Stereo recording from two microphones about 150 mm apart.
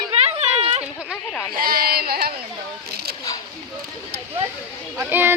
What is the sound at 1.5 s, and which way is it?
Speech, 80° right.